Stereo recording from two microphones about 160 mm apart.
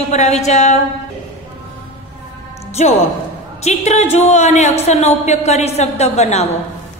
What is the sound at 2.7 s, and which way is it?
A woman's voice, 45° left (ahead or behind).